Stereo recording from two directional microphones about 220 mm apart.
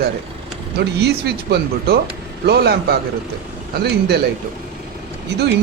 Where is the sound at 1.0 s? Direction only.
50° right (ahead or behind).